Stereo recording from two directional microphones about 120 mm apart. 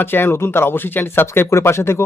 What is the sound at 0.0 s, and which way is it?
Speech, 20° left (ahead or behind).